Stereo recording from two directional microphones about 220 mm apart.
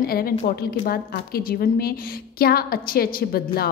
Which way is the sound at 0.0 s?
45° left (ahead or behind).